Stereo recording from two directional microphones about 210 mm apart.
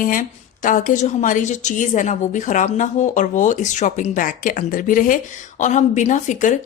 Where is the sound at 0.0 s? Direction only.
40° left (ahead or behind).